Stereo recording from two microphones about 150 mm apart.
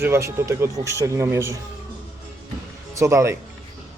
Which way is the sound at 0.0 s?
20° right (ahead or behind).